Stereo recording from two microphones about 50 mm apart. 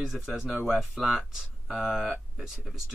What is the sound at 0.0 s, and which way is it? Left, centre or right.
Speech, centre.